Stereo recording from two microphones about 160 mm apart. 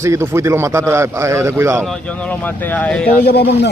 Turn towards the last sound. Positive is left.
turn(degrees=90)